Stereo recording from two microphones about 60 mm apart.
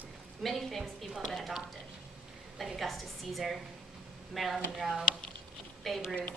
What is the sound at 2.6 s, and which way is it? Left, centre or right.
Speech, centre.